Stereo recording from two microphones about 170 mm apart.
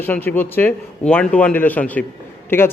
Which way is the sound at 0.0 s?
10° left (ahead or behind).